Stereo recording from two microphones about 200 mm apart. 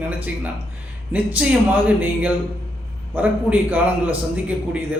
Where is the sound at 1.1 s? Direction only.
10° right (ahead or behind).